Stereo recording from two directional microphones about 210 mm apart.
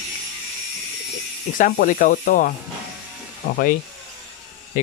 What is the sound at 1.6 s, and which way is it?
Speech, 40° left (ahead or behind).